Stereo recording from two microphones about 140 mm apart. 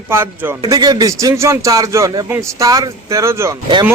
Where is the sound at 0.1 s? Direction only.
15° right (ahead or behind).